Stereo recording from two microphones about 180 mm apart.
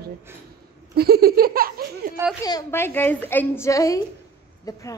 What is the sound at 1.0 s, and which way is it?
Laughter, 60° right (ahead or behind).